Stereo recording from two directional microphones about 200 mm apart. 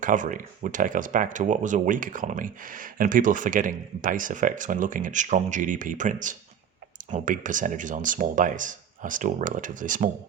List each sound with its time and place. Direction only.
0.0 s speech: 40° right (ahead or behind)